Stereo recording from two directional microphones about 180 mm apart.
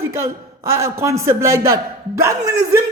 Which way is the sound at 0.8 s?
15° right (ahead or behind).